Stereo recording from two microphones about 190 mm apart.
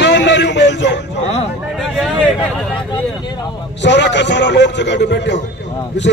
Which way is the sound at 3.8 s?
70° left (ahead or behind).